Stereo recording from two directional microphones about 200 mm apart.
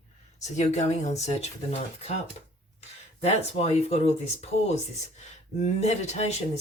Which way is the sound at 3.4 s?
35° left (ahead or behind).